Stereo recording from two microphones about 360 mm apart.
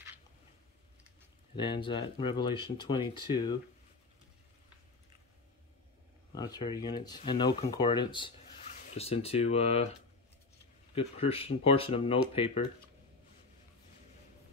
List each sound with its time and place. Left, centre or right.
1.6 s speech: centre
6.3 s speech: centre
11.0 s speech: centre